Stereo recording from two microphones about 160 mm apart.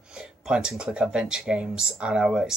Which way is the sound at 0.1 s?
5° right (ahead or behind).